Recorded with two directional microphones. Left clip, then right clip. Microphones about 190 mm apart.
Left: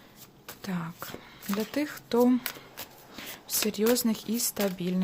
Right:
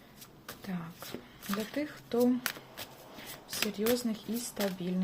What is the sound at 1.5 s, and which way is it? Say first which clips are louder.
Speech: left 5 dB; 25° left (ahead or behind).